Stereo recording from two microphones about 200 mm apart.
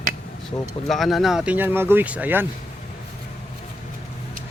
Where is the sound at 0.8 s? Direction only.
Centre (ahead or behind).